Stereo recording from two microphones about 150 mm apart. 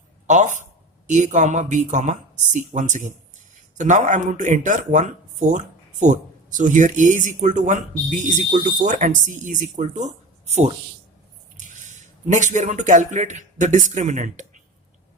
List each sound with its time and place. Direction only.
0.3 s speech: 55° right (ahead or behind)
11.5 s speech: 55° right (ahead or behind)